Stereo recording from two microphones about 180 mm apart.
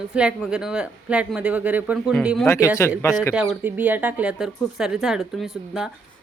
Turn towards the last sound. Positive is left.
turn(degrees=-5)  # may be behind; listen again after turning